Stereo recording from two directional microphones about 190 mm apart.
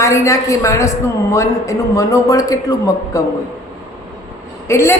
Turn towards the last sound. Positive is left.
turn(degrees=15)  # may be behind; listen again after turning